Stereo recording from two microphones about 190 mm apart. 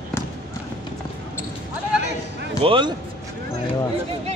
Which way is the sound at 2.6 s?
25° right (ahead or behind).